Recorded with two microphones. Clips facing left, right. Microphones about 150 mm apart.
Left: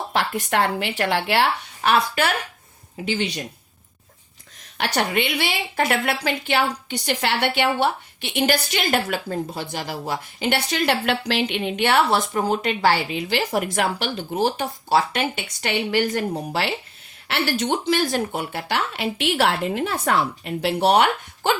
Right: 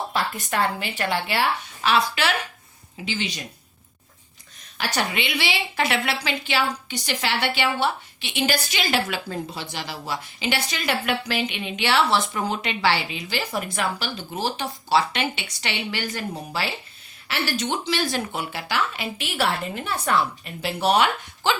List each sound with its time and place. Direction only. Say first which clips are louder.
0.1 s a woman's voice: left 3 dB; 75° left (ahead or behind); by 3.4 s 60° left (ahead or behind)
4.8 s a woman's voice: left 4 dB; 55° left (ahead or behind); by 20.5 s 75° left (ahead or behind)
20.8 s speech: left 2 dB; 55° left (ahead or behind)